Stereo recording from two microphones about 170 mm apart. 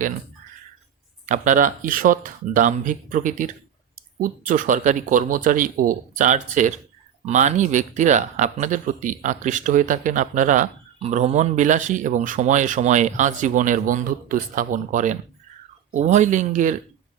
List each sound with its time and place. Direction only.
1.3 s a man's voice: 50° right (ahead or behind)